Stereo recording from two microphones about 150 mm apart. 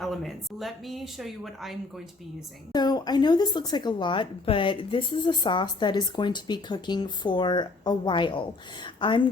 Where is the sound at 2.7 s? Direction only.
25° left (ahead or behind).